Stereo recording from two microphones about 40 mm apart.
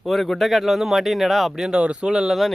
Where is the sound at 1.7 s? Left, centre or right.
Right.